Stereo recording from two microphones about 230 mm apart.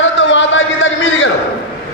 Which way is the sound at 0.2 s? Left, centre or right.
Left.